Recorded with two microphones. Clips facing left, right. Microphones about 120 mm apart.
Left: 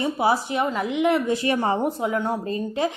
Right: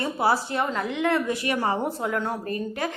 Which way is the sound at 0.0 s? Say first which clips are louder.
Left 2 dB; 15° left (ahead or behind).